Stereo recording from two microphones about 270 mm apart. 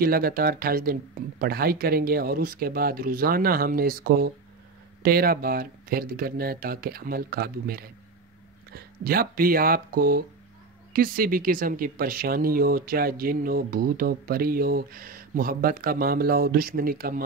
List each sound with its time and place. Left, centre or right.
0.0 s speech: right